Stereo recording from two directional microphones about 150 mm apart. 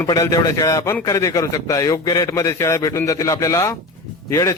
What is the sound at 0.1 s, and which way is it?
A man's voice, 20° left (ahead or behind).